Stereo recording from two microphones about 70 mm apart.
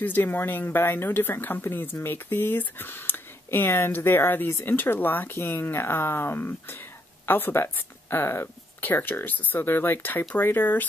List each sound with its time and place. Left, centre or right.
0.0 s speech: left